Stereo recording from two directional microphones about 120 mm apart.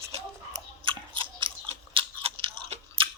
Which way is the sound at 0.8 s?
45° right (ahead or behind).